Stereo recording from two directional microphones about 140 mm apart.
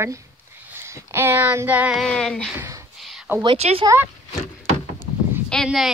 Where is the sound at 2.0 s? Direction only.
5° left (ahead or behind).